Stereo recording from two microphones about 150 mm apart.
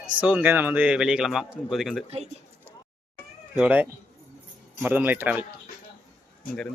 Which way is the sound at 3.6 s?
10° right (ahead or behind).